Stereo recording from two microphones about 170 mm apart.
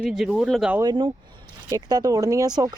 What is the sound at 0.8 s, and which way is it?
Speech, 25° right (ahead or behind).